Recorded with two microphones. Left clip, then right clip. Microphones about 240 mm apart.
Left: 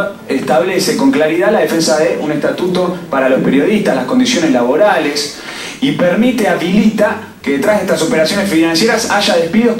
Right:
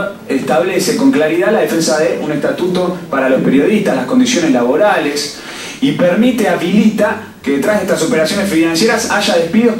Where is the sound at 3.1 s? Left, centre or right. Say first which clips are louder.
Even; centre.